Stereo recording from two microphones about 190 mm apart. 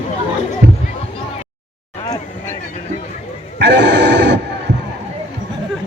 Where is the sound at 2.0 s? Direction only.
20° left (ahead or behind).